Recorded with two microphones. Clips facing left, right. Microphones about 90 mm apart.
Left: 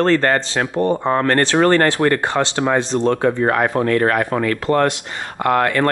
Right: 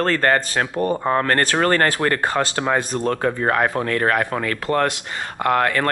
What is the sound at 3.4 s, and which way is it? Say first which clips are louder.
Speech: left 2 dB; 5° left (ahead or behind).